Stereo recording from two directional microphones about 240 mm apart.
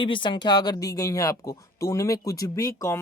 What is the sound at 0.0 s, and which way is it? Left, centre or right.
Speech, centre.